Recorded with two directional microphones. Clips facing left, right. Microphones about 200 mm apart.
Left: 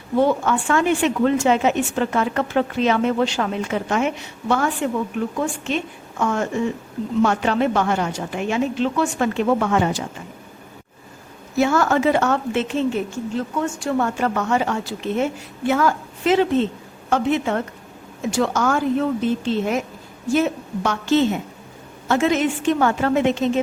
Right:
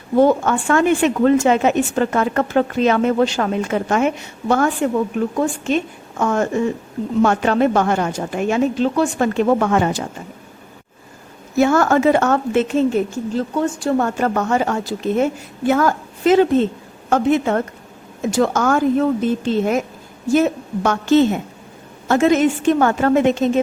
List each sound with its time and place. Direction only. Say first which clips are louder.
0.2 s a woman's voice: right 4 dB; 45° right (ahead or behind)
11.5 s a woman's voice: right 3 dB; 50° right (ahead or behind)
13.3 s a woman's voice: right 4 dB; 35° right (ahead or behind)